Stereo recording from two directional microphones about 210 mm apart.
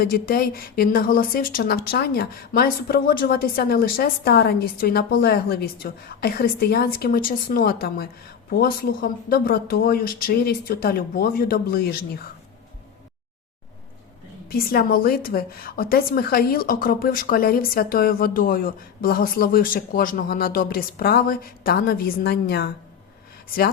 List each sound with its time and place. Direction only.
0.0 s a woman's voice: 45° left (ahead or behind)
14.5 s a woman's voice: 45° left (ahead or behind)